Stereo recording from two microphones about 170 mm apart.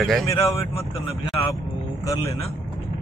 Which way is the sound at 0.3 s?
20° left (ahead or behind).